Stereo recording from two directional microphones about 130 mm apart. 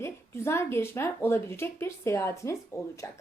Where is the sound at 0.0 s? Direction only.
20° left (ahead or behind).